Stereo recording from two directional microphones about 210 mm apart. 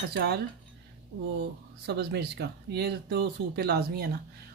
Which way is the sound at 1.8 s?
50° right (ahead or behind).